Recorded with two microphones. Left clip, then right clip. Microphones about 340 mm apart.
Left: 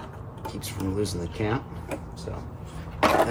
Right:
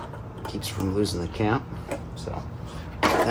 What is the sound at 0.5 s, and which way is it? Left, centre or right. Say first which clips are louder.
Speech: right 3 dB; centre.